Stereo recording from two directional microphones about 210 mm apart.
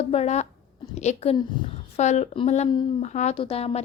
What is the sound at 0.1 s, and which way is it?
A woman's voice, 30° left (ahead or behind).